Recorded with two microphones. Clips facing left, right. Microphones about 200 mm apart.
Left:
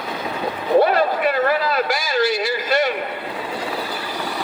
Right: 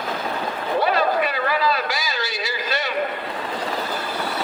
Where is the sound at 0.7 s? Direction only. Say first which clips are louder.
Left 4 dB; 50° left (ahead or behind).